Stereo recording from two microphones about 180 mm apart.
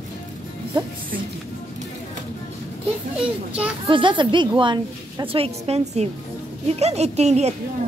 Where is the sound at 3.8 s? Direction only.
25° right (ahead or behind).